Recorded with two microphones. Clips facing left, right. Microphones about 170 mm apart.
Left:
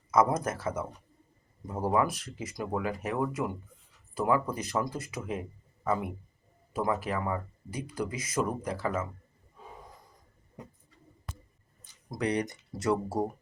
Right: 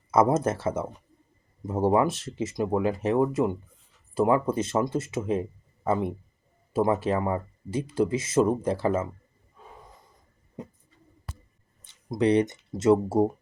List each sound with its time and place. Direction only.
0.1 s speech: 25° right (ahead or behind)
11.8 s speech: 25° right (ahead or behind)